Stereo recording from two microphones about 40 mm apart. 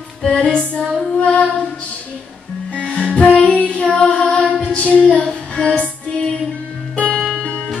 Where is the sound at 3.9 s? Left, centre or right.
Left.